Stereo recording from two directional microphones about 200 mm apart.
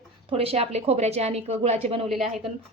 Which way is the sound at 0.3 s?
30° right (ahead or behind).